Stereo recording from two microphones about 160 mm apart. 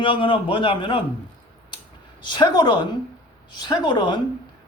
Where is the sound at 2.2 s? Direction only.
25° left (ahead or behind).